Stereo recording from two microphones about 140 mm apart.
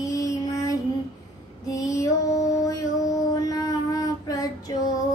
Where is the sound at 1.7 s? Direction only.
25° left (ahead or behind).